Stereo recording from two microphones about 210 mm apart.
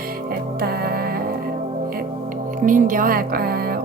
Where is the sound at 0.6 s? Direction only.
45° right (ahead or behind).